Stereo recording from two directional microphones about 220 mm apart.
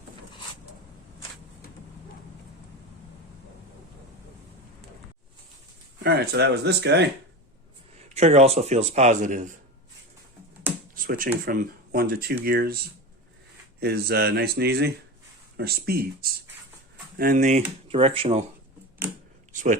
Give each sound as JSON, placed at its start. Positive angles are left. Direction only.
{"t": 6.0, "sound": "speech", "side_deg": -50}
{"t": 8.1, "sound": "speech", "side_deg": -30}
{"t": 10.9, "sound": "speech", "side_deg": -40}
{"t": 19.5, "sound": "a man's voice", "side_deg": -35}